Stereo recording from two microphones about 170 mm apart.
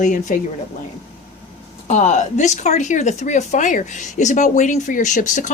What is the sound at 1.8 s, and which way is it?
Speech, 45° left (ahead or behind).